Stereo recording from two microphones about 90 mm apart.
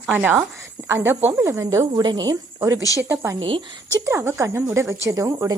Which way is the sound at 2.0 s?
50° right (ahead or behind).